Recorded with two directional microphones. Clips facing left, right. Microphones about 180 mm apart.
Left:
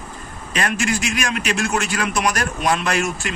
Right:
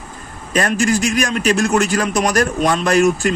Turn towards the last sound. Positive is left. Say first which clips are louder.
# right 8 dB
turn(degrees=-40)  # may be behind; listen again after turning